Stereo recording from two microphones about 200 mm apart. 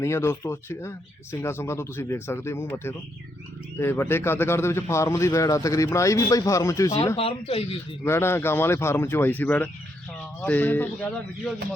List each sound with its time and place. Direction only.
0.0 s a man's voice: 15° left (ahead or behind)
7.2 s speech: 30° left (ahead or behind)
8.0 s a man's voice: 10° left (ahead or behind)